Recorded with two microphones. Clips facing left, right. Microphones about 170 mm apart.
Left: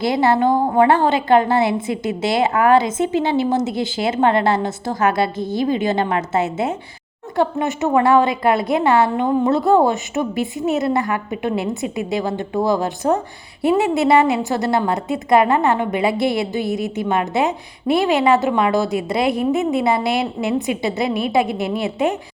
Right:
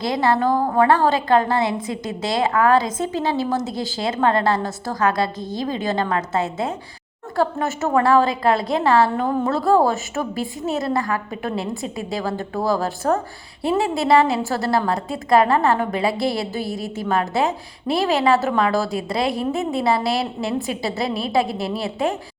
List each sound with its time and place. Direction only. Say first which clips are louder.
0.0 s speech: left 3 dB; 25° left (ahead or behind)
7.7 s speech: left 2 dB; 15° left (ahead or behind)